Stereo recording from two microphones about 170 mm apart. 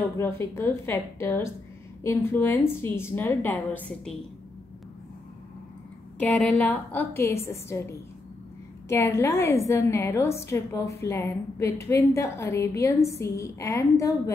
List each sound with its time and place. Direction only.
0.2 s a woman's voice: 15° left (ahead or behind)
6.1 s a woman's voice: 5° left (ahead or behind)
8.8 s a woman's voice: 15° left (ahead or behind)